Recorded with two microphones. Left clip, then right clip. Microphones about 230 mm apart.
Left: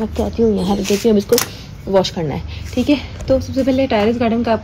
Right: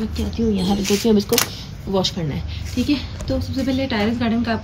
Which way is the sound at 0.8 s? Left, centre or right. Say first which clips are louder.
Left 3 dB; centre.